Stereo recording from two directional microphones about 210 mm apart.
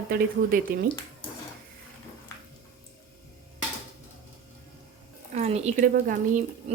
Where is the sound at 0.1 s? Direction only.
45° right (ahead or behind).